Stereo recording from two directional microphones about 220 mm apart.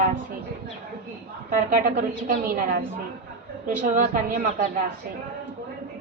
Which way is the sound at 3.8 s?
35° right (ahead or behind).